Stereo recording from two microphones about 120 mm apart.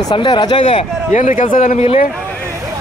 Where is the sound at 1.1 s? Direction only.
90° left.